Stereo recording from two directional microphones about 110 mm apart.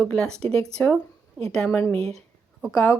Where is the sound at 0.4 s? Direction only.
70° right (ahead or behind).